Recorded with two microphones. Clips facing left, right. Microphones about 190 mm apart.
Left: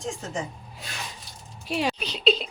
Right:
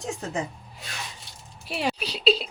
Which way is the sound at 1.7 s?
Centre (ahead or behind).